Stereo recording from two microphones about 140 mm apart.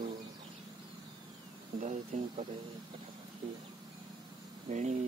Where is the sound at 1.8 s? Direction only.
55° right (ahead or behind).